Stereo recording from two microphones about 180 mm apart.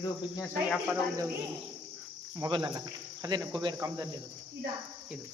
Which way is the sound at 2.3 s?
25° right (ahead or behind).